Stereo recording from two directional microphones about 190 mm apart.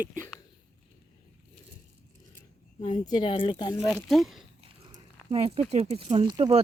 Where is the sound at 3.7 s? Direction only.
Centre (ahead or behind).